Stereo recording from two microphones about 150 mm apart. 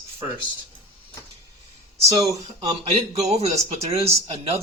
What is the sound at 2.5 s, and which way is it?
Speech, 50° right (ahead or behind).